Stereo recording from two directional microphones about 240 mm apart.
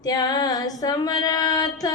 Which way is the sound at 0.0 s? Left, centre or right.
Centre.